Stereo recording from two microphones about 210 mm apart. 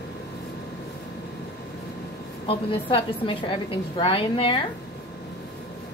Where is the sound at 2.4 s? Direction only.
25° left (ahead or behind).